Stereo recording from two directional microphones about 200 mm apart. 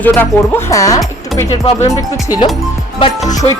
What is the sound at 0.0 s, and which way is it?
Speech, 10° left (ahead or behind).